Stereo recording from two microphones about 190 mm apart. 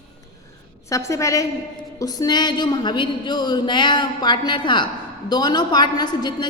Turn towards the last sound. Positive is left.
turn(degrees=20)  # may be behind; listen again after turning